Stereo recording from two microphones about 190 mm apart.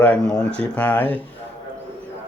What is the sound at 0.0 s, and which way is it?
Speech, 5° left (ahead or behind).